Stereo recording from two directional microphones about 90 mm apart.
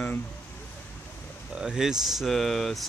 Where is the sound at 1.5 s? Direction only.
10° right (ahead or behind).